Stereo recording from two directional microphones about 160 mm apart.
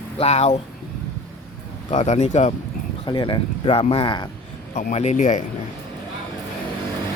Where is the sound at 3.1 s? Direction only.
30° left (ahead or behind).